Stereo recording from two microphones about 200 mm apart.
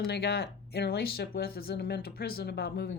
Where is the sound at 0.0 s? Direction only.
55° left (ahead or behind).